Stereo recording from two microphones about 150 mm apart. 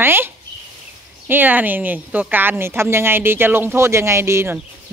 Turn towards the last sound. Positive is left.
turn(degrees=-15)  # may be behind; listen again after turning